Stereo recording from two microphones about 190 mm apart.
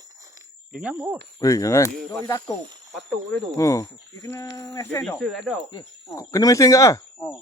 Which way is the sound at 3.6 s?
15° left (ahead or behind).